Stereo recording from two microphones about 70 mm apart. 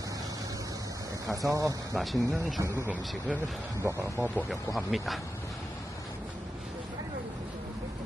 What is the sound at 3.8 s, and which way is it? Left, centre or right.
Speech, right.